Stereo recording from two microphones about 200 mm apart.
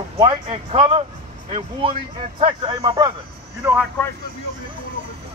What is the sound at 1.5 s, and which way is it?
Speech, 25° right (ahead or behind).